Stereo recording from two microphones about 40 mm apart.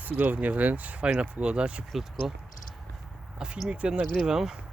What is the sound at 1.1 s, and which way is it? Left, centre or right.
Speech, right.